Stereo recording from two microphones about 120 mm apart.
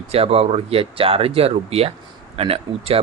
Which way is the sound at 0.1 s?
55° right (ahead or behind).